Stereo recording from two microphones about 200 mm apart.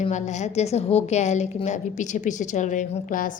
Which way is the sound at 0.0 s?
35° left (ahead or behind).